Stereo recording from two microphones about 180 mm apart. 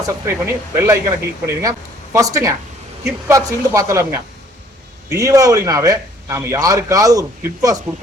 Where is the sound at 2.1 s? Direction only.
20° right (ahead or behind).